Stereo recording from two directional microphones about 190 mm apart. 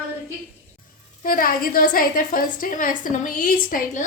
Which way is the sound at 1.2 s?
50° left (ahead or behind).